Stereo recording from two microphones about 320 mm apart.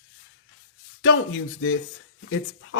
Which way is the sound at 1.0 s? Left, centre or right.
Left.